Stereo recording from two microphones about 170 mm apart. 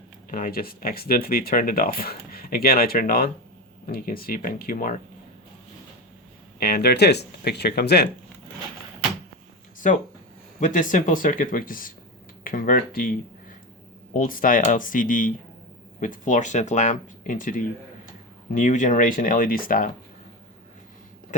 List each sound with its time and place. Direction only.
0.3 s speech: 55° left (ahead or behind)
6.6 s speech: 60° left (ahead or behind)
9.8 s speech: 50° left (ahead or behind)